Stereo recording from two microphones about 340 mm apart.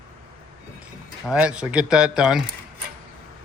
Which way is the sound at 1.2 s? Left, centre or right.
Centre.